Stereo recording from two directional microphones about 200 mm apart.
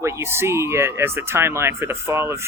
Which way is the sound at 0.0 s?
10° right (ahead or behind).